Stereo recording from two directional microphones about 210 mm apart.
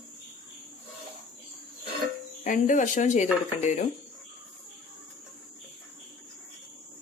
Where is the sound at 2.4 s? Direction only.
40° left (ahead or behind).